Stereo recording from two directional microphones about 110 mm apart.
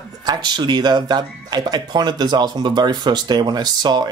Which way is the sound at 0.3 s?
40° right (ahead or behind).